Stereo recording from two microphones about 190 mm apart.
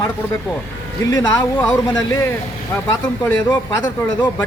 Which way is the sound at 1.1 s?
15° left (ahead or behind).